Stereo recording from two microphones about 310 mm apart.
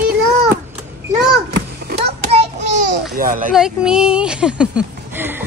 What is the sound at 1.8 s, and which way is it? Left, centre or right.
Children playing, right.